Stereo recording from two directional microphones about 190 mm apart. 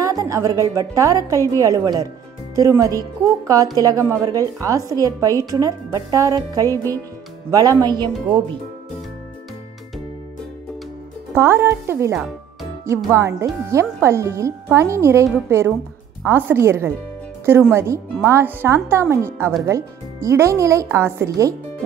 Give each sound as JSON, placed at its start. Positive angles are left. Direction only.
{"t": 0.0, "sound": "a woman's voice", "side_deg": -20}
{"t": 11.3, "sound": "a woman's voice", "side_deg": -15}